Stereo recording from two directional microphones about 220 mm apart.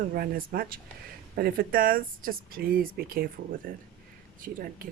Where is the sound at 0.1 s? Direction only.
40° right (ahead or behind).